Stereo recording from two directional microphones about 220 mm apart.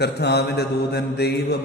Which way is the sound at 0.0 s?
50° left (ahead or behind).